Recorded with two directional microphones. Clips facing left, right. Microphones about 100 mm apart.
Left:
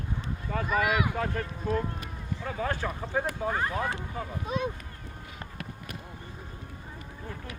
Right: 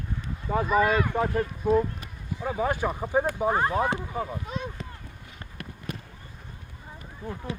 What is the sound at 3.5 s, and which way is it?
Speech, 30° right (ahead or behind).